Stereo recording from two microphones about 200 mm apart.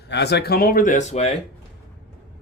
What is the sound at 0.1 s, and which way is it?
Speech, 55° left (ahead or behind).